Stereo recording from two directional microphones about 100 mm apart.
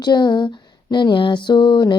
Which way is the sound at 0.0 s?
45° left (ahead or behind).